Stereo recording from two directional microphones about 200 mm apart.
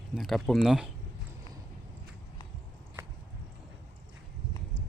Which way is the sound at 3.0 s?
10° right (ahead or behind).